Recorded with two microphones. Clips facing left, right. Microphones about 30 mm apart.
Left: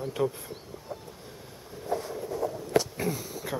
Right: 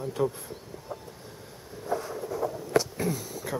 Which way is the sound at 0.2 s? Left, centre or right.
Centre.